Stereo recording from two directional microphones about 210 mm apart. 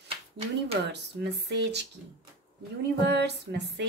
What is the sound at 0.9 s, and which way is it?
Speech, 55° right (ahead or behind).